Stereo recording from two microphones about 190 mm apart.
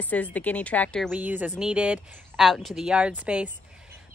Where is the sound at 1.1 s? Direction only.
10° right (ahead or behind).